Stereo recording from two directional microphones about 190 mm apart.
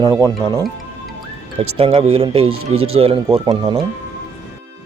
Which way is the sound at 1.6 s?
30° right (ahead or behind).